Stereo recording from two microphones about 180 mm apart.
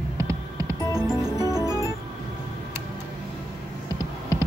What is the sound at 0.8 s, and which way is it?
Music, 20° left (ahead or behind).